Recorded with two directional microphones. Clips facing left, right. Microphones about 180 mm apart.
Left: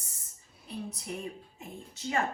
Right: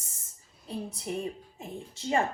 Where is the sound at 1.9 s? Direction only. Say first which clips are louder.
Right 4 dB; 30° right (ahead or behind).